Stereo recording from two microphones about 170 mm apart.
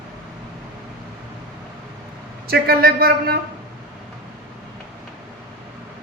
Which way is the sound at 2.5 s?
60° right (ahead or behind).